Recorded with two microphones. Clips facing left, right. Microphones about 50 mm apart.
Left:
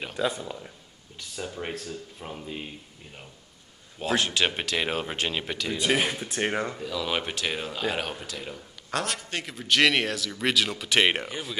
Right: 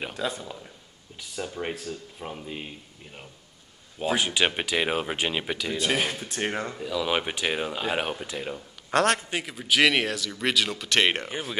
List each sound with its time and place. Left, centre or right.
0.4 s speech: centre
1.3 s speech: centre
4.0 s speech: centre
5.8 s speech: centre
6.8 s speech: centre
8.9 s a man's voice: right
9.3 s speech: centre